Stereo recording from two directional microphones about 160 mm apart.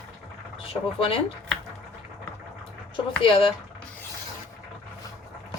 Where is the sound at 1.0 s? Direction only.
35° left (ahead or behind).